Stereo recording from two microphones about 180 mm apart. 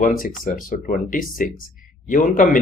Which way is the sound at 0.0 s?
50° left (ahead or behind).